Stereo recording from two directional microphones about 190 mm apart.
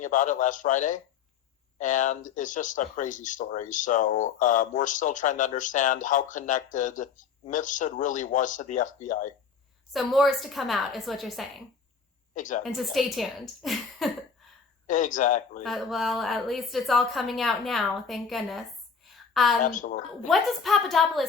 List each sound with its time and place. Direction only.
0.0 s speech: 40° left (ahead or behind)
9.9 s a woman's voice: centre (ahead or behind)
12.3 s a woman's voice: 40° left (ahead or behind)
12.6 s a woman's voice: centre (ahead or behind)
14.8 s speech: 40° left (ahead or behind)
15.6 s a woman's voice: centre (ahead or behind)
19.6 s speech: 45° left (ahead or behind)
20.2 s a woman's voice: centre (ahead or behind)